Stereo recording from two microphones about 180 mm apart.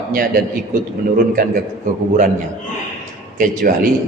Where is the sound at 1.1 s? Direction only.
50° right (ahead or behind).